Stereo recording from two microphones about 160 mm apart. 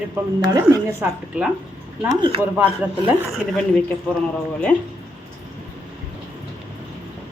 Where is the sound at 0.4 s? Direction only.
20° right (ahead or behind).